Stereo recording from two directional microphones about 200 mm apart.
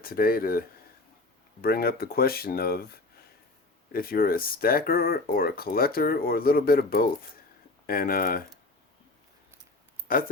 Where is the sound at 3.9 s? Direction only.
45° left (ahead or behind).